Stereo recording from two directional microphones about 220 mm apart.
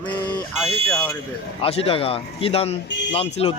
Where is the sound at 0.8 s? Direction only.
5° left (ahead or behind).